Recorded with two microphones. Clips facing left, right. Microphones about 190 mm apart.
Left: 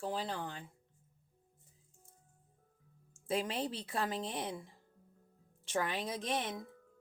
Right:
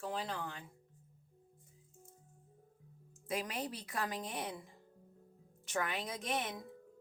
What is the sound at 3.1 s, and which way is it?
A woman's voice, 30° left (ahead or behind).